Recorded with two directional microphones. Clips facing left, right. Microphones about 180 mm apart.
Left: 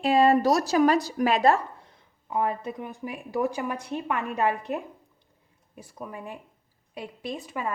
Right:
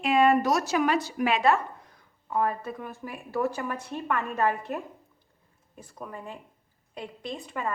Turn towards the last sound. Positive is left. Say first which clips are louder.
# left 1 dB
turn(degrees=5)  # may be behind; listen again after turning